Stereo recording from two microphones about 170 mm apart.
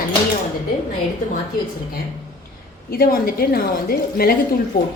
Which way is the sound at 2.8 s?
60° left (ahead or behind).